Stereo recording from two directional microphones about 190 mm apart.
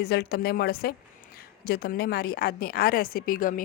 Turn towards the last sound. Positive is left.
turn(degrees=45)  # may be behind; listen again after turning